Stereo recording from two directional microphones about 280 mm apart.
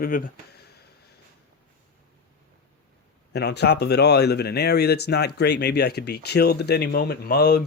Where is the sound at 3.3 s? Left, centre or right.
Left.